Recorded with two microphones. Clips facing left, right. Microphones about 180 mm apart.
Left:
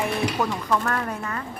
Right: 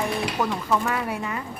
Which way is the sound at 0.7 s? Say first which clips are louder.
Right 1 dB; 5° right (ahead or behind).